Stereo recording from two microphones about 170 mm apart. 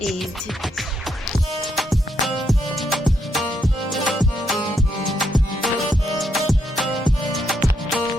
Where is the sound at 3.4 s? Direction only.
25° left (ahead or behind).